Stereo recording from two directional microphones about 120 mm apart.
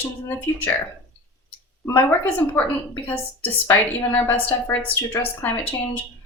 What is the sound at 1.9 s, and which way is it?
Speech, 15° left (ahead or behind).